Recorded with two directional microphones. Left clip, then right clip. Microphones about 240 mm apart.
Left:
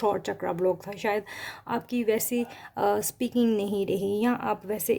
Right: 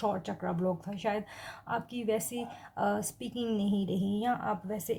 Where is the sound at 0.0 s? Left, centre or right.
Left.